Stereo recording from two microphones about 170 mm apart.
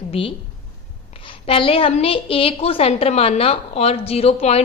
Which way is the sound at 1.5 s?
35° left (ahead or behind).